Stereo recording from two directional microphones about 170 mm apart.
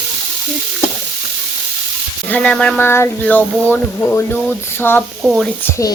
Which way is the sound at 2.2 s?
10° left (ahead or behind).